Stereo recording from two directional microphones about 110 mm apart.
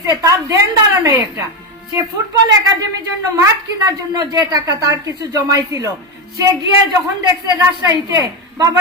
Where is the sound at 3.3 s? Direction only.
30° right (ahead or behind).